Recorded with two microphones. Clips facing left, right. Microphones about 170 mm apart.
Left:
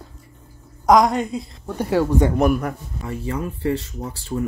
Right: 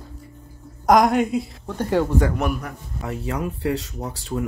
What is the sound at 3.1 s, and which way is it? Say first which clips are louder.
Speech: even; 80° right.